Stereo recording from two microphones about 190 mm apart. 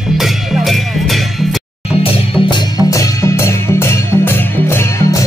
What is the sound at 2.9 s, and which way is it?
Music, 15° left (ahead or behind).